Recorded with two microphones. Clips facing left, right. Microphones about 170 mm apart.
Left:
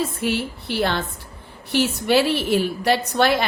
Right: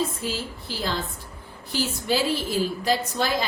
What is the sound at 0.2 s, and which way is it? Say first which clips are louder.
A woman's voice: left 7 dB; 70° left (ahead or behind).